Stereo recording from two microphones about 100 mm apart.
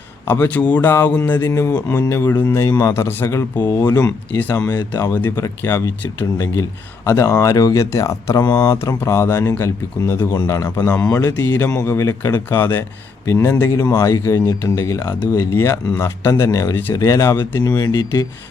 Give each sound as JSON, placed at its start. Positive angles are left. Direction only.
{"t": 0.3, "sound": "speech", "side_deg": 20}
{"t": 1.4, "sound": "speech", "side_deg": 30}
{"t": 2.6, "sound": "speech", "side_deg": 35}
{"t": 10.3, "sound": "speech", "side_deg": 40}
{"t": 17.6, "sound": "speech", "side_deg": 40}